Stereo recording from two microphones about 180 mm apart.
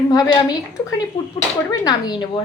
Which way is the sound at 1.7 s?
25° left (ahead or behind).